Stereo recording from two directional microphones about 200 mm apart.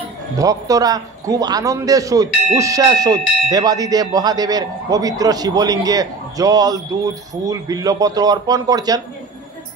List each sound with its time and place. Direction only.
0.4 s a man's voice: 15° right (ahead or behind)